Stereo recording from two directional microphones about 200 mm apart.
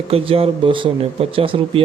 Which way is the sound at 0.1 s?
30° right (ahead or behind).